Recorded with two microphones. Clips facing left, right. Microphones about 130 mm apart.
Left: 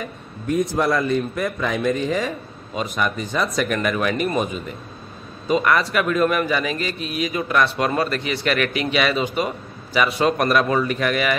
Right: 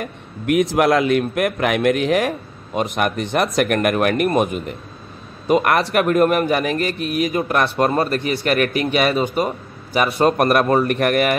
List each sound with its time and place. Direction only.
0.0 s a man's voice: 80° right; by 11.3 s 55° right (ahead or behind)